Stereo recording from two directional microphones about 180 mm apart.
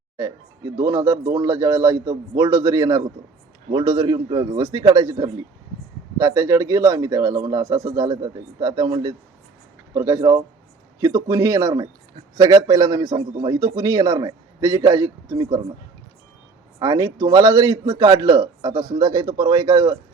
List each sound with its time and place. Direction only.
0.2 s speech: 20° right (ahead or behind)
16.8 s speech: 20° right (ahead or behind)